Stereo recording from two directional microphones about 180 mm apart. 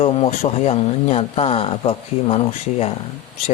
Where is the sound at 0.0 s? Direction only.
35° left (ahead or behind).